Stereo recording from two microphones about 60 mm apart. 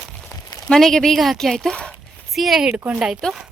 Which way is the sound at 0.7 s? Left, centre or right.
Centre.